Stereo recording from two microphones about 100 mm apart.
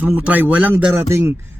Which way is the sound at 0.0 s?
15° right (ahead or behind).